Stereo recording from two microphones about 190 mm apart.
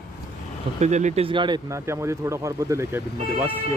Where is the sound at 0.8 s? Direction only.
40° right (ahead or behind); by 3.0 s 15° right (ahead or behind).